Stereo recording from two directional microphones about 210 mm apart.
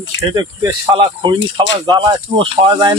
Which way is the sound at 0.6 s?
20° right (ahead or behind).